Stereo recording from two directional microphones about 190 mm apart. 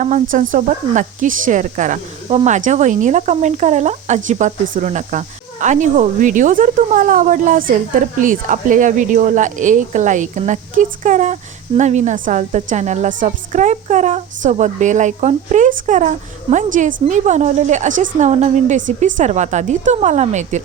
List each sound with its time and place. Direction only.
0.0 s a woman's voice: 40° right (ahead or behind)